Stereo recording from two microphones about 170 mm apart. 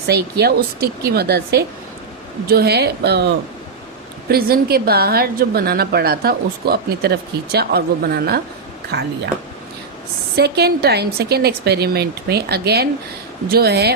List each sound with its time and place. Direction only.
0.1 s speech: 70° right (ahead or behind)
4.3 s a woman's voice: 65° right (ahead or behind)
8.9 s speech: 80° right
10.3 s speech: 70° right (ahead or behind)